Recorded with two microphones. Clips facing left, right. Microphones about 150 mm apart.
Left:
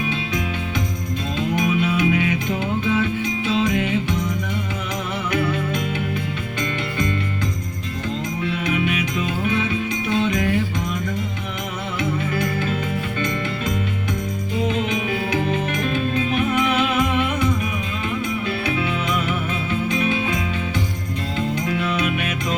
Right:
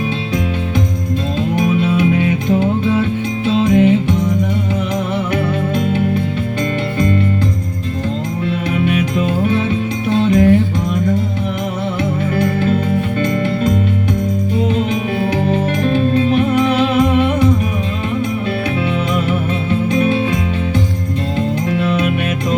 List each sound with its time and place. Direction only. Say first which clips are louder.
1.4 s music: right 4 dB; 35° right (ahead or behind)
5.7 s music: right 8 dB; 30° right (ahead or behind)
8.4 s music: right 5 dB; 40° right (ahead or behind)
12.4 s music: right 8 dB; 30° right (ahead or behind)
14.7 s music: right 5 dB; 35° right (ahead or behind)
19.1 s music: right 6 dB; 30° right (ahead or behind)
21.7 s music: right 6 dB; 35° right (ahead or behind)